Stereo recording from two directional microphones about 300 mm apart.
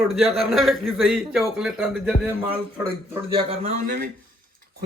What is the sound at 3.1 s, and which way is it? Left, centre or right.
Speech, centre.